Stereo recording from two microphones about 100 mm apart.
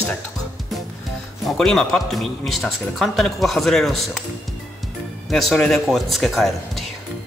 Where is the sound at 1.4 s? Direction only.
5° left (ahead or behind).